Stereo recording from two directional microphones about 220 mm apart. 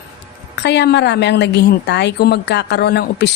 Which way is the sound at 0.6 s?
50° left (ahead or behind).